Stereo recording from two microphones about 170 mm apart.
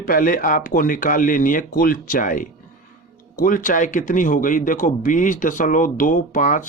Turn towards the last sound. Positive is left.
turn(degrees=50)  # may be behind; listen again after turning